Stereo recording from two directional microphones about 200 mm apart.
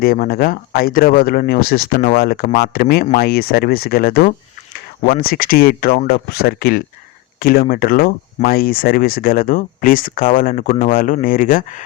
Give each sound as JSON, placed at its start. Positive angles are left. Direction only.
{"t": 0.0, "sound": "speech", "side_deg": 50}